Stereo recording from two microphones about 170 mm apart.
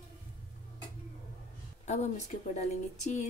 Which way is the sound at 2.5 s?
40° left (ahead or behind).